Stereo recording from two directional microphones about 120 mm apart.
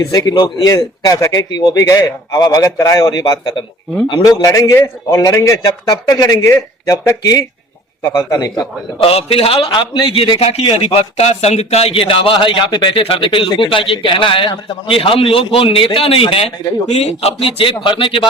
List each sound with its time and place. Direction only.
0.0 s a man's voice: 30° left (ahead or behind)
4.3 s a man's voice: 30° left (ahead or behind)
9.0 s a man's voice: 55° left (ahead or behind)
16.8 s a man's voice: 65° left (ahead or behind); by 18.2 s 45° left (ahead or behind)